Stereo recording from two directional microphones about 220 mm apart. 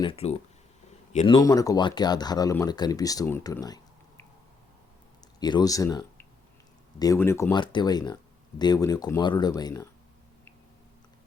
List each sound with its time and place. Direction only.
0.0 s speech: 25° left (ahead or behind)
1.4 s speech: 15° left (ahead or behind)
5.4 s speech: 20° left (ahead or behind)